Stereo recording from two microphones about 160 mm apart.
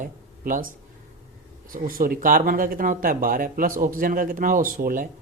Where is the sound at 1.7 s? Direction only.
60° right (ahead or behind).